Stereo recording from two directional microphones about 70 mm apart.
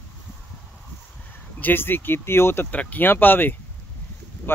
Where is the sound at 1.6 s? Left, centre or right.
Left.